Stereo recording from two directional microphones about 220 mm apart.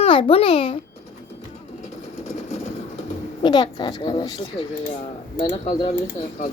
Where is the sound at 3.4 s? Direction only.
20° left (ahead or behind).